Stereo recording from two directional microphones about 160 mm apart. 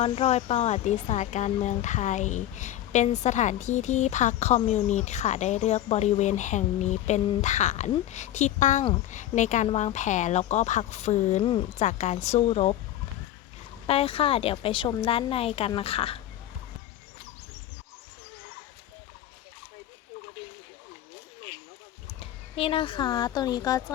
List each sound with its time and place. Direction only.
0.0 s speech: 40° left (ahead or behind)
13.8 s a woman's voice: 35° left (ahead or behind)
22.0 s speech: 35° left (ahead or behind)